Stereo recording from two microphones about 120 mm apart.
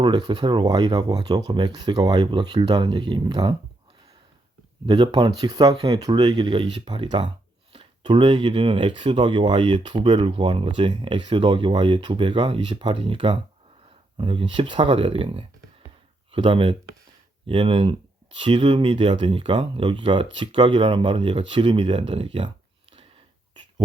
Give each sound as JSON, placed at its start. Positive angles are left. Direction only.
{"t": 0.0, "sound": "speech", "side_deg": -40}
{"t": 4.9, "sound": "speech", "side_deg": -40}